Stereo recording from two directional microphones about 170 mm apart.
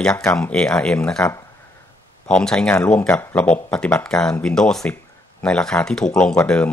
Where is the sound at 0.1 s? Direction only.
20° left (ahead or behind).